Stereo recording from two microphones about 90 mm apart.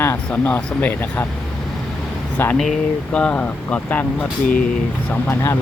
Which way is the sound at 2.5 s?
5° left (ahead or behind).